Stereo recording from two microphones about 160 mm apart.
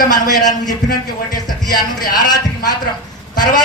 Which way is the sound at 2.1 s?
25° left (ahead or behind).